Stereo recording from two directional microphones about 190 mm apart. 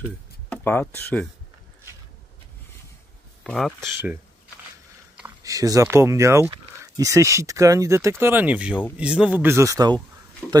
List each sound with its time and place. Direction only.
0.5 s speech: 10° left (ahead or behind)
3.4 s speech: centre (ahead or behind)
5.1 s speech: 15° right (ahead or behind)
10.4 s speech: 5° right (ahead or behind)